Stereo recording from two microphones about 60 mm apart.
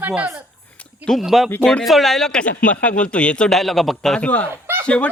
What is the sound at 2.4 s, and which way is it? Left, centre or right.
A man's voice, left.